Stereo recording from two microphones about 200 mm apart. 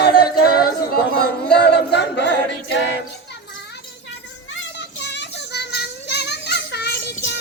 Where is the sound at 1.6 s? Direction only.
55° left (ahead or behind).